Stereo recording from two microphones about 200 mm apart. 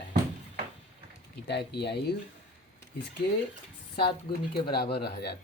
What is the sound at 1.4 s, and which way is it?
Speech, 55° left (ahead or behind).